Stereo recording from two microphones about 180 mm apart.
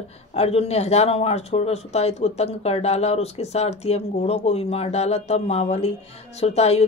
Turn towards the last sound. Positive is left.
turn(degrees=35)  # may be behind; listen again after turning